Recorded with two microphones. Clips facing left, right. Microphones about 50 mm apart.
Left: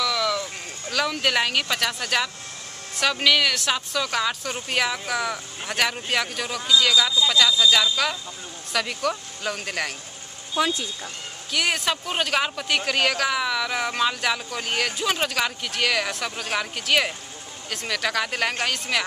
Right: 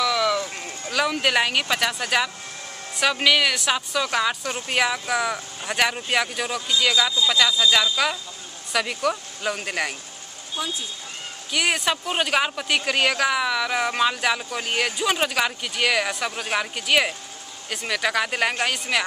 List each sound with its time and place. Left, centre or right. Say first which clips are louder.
0.0 s a sound: right 3 dB; centre
3.0 s speech: right 1 dB; centre
10.5 s speech: left 6 dB; left
11.5 s speech: right 1 dB; centre